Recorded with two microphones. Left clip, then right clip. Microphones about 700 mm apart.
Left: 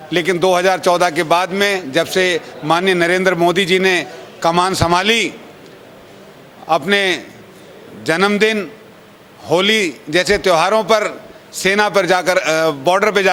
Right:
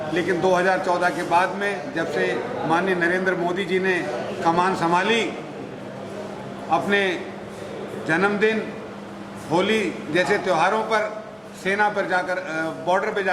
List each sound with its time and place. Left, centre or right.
0.1 s a man's voice: left
6.7 s a man's voice: left